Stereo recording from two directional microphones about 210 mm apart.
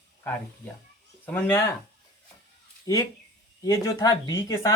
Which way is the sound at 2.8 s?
15° left (ahead or behind).